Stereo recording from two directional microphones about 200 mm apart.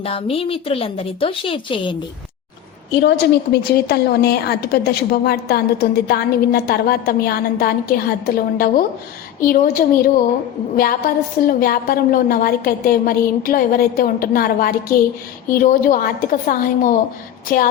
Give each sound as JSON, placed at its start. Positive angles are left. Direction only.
{"t": 0.0, "sound": "a woman's voice", "side_deg": 30}
{"t": 3.0, "sound": "a woman's voice", "side_deg": 55}